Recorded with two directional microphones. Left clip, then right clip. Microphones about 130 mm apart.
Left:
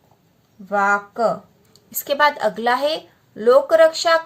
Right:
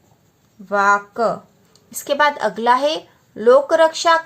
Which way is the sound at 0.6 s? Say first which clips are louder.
Right 3 dB; 35° right (ahead or behind).